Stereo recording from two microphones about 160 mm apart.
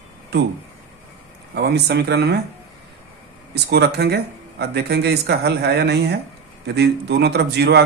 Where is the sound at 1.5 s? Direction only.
90° right.